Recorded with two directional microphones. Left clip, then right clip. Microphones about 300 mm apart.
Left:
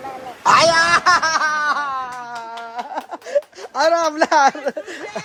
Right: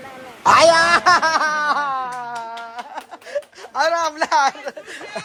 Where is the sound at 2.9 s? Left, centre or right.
Left.